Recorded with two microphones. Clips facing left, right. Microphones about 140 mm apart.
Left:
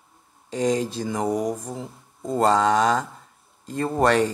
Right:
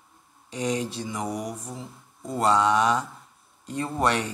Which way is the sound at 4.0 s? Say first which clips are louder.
Left 6 dB; 45° left (ahead or behind).